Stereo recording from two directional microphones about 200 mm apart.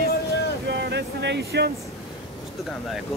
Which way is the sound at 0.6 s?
55° right (ahead or behind).